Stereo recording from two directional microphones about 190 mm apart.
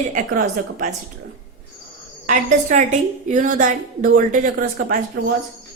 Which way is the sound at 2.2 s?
40° right (ahead or behind).